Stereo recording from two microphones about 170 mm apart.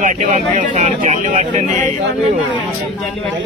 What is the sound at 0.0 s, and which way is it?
Speech, 50° right (ahead or behind).